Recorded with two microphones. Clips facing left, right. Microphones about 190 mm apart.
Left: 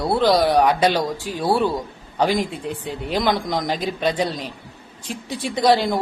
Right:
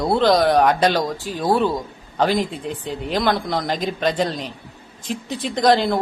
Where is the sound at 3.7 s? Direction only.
45° right (ahead or behind).